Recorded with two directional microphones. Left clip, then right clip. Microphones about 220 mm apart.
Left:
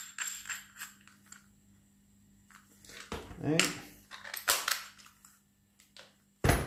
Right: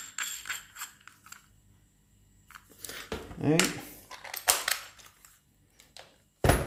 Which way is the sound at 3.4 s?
40° right (ahead or behind).